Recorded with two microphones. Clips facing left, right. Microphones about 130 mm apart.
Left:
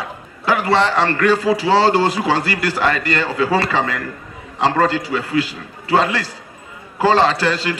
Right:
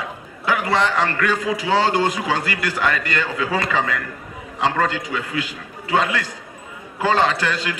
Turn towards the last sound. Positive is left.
turn(degrees=35)  # may be behind; listen again after turning